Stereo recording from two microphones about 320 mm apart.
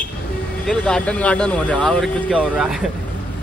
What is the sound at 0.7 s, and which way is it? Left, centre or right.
Speech, centre.